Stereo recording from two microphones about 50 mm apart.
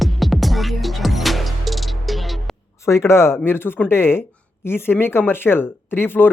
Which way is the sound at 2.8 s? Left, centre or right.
Left.